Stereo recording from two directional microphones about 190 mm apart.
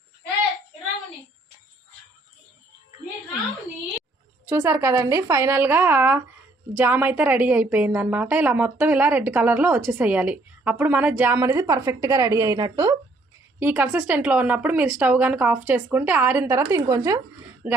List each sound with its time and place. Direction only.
4.4 s a woman's voice: 15° right (ahead or behind)